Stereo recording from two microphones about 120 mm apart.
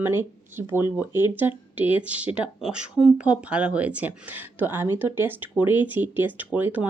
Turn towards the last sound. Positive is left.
turn(degrees=-15)  # may be behind; listen again after turning